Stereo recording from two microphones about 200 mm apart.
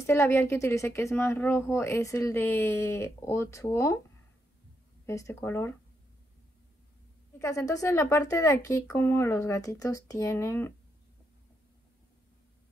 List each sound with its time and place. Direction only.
0.0 s speech: 10° left (ahead or behind)
5.0 s speech: 15° left (ahead or behind)
7.3 s speech: 15° left (ahead or behind)